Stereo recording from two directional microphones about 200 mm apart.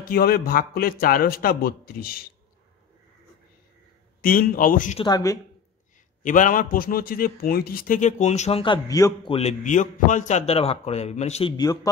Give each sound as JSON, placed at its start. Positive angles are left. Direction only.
{"t": 0.0, "sound": "a man's voice", "side_deg": 50}
{"t": 4.2, "sound": "a man's voice", "side_deg": 45}
{"t": 4.9, "sound": "speech", "side_deg": 20}
{"t": 6.2, "sound": "a man's voice", "side_deg": 40}
{"t": 9.3, "sound": "a man's voice", "side_deg": 35}
{"t": 11.5, "sound": "speech", "side_deg": 20}